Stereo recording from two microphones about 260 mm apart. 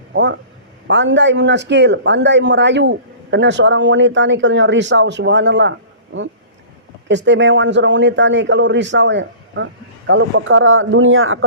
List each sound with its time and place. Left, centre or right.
0.1 s speech: right
7.1 s speech: right